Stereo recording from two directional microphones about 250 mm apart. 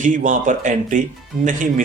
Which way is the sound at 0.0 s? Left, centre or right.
Right.